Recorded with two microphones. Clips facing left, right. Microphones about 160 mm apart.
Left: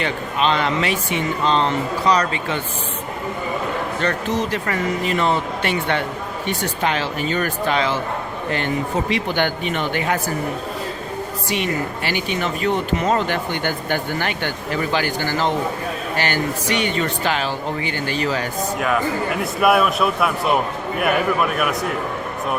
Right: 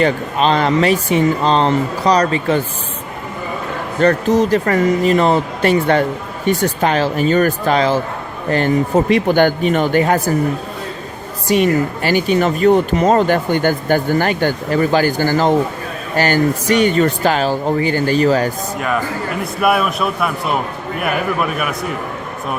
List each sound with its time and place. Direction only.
0.0 s speech: 40° right (ahead or behind)
4.0 s speech: 40° right (ahead or behind)
11.4 s speech: 45° right (ahead or behind)
18.8 s a man's voice: centre (ahead or behind)